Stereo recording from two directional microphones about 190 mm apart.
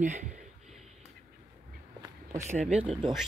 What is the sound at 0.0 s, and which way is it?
Speech, 40° right (ahead or behind).